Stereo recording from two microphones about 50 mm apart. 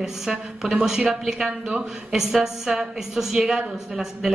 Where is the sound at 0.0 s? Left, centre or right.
Centre.